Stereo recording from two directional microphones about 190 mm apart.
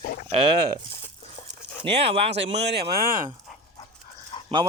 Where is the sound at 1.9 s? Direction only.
30° right (ahead or behind).